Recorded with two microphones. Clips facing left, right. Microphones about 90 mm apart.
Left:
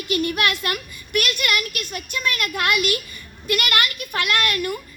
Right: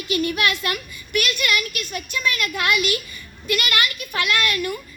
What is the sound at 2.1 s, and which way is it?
A woman's voice, 65° left (ahead or behind).